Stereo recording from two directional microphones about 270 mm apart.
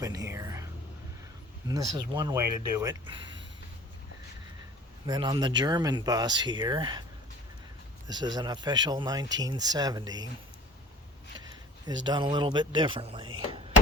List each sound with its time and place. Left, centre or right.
0.0 s speech: centre
5.0 s speech: centre
8.0 s speech: centre
12.0 s speech: centre